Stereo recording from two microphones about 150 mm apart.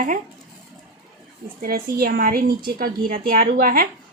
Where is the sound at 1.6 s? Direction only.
75° right (ahead or behind).